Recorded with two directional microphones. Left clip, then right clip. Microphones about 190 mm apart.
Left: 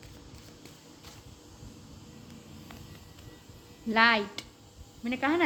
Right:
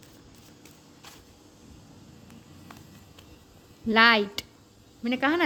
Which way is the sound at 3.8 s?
50° right (ahead or behind).